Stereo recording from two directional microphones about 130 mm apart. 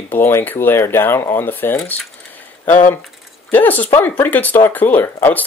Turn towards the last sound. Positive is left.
turn(degrees=15)  # may be behind; listen again after turning